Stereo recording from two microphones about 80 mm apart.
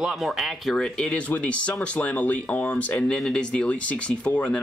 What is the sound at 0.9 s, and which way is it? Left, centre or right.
Speech, centre.